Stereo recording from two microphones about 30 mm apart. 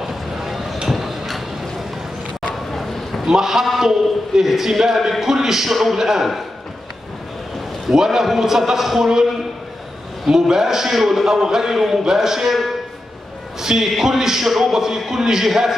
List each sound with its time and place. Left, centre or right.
0.0 s a sound: centre
2.7 s a sound: centre
3.3 s a man's voice: centre
5.9 s a man's voice: centre
7.9 s a man's voice: centre
10.3 s a man's voice: centre
11.0 s a man's voice: centre
13.6 s a man's voice: centre